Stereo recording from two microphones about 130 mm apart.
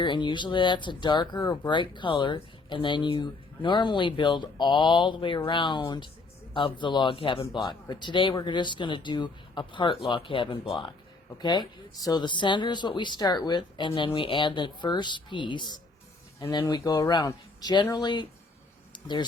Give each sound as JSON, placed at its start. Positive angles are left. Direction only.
{"t": 0.0, "sound": "speech", "side_deg": 35}